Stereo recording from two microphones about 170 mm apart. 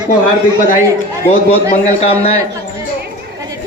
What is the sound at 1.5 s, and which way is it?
Speech, 40° left (ahead or behind).